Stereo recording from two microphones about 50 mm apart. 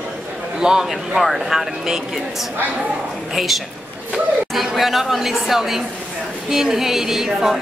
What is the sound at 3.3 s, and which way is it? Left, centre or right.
A woman's voice, centre.